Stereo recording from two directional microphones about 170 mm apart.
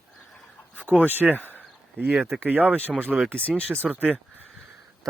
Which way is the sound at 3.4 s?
5° left (ahead or behind).